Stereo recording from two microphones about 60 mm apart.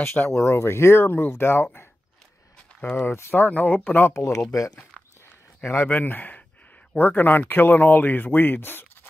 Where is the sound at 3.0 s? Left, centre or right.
Left.